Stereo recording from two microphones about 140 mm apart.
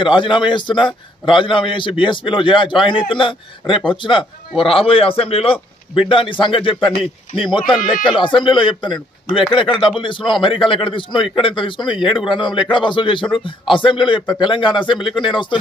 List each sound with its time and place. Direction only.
0.0 s a man's voice: 35° left (ahead or behind)
7.5 s speech: centre (ahead or behind)
8.2 s a man's voice: 35° left (ahead or behind)